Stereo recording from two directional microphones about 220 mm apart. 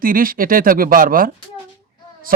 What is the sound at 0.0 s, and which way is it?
Speech, 40° right (ahead or behind).